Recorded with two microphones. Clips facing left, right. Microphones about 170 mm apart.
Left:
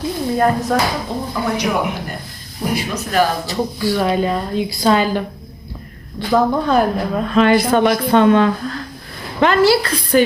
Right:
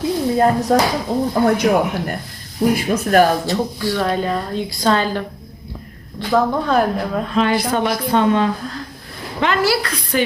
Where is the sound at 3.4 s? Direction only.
5° left (ahead or behind).